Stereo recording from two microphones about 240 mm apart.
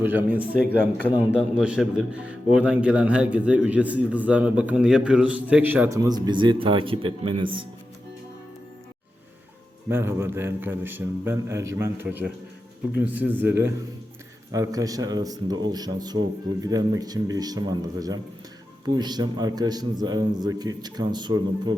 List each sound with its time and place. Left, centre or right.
0.0 s a man's voice: centre
9.9 s a man's voice: centre